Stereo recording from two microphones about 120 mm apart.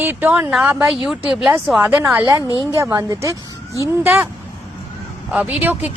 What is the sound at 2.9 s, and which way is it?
Speech, 25° right (ahead or behind).